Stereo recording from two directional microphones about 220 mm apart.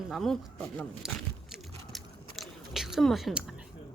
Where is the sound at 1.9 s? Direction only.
Centre (ahead or behind).